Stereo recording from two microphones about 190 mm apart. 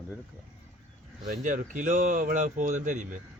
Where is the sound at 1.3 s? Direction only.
45° right (ahead or behind).